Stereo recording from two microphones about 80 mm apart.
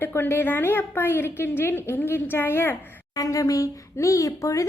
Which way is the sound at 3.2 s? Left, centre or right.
Left.